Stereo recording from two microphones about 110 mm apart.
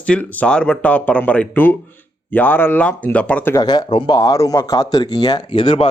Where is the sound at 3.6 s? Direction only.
40° left (ahead or behind).